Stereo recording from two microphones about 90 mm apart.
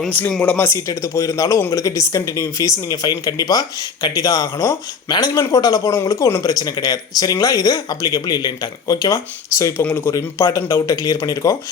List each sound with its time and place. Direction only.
0.4 s speech: 25° left (ahead or behind)
0.9 s speech: 40° left (ahead or behind)
5.0 s speech: 50° left (ahead or behind); by 10.9 s 35° left (ahead or behind)
10.9 s speech: 45° left (ahead or behind)